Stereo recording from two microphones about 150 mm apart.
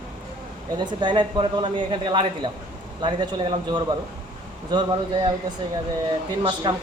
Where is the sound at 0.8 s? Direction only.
30° right (ahead or behind).